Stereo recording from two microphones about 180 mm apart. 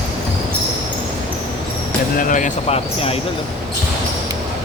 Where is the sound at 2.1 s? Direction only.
45° left (ahead or behind).